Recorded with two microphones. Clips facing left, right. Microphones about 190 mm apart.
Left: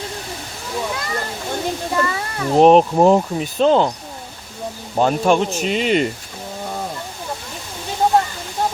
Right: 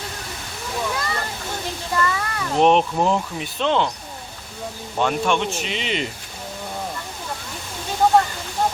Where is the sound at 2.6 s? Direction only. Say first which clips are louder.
Left 6 dB; 40° left (ahead or behind).